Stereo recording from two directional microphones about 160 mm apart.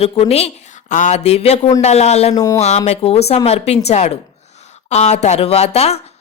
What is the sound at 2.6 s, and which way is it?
A woman's voice, 45° left (ahead or behind).